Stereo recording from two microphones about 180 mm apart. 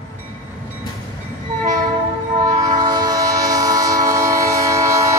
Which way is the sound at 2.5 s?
20° right (ahead or behind).